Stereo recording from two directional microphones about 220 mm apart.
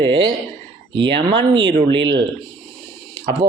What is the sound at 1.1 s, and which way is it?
Speech, 20° right (ahead or behind).